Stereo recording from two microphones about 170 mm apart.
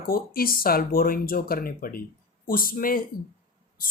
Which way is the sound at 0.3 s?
60° left (ahead or behind).